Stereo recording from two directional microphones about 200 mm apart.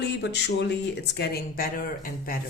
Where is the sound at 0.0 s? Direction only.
55° left (ahead or behind).